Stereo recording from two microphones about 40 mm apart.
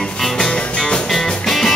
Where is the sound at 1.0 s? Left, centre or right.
Centre.